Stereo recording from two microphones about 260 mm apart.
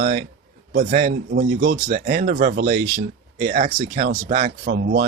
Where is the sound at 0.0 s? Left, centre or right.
Right.